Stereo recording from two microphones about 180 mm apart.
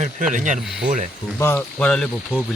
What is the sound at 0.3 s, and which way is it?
Speech, 45° right (ahead or behind).